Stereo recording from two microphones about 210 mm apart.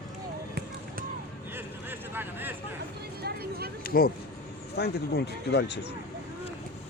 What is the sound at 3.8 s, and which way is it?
Speech, 45° left (ahead or behind).